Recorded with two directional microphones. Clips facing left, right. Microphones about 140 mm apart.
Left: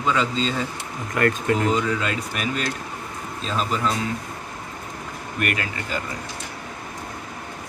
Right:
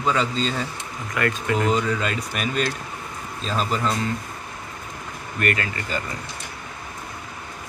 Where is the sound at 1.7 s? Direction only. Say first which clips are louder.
Even; centre (ahead or behind).